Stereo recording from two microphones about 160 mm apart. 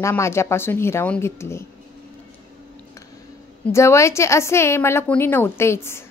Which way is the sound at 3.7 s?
20° left (ahead or behind).